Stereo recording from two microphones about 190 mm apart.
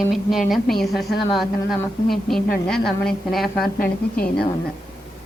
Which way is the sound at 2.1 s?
Centre (ahead or behind).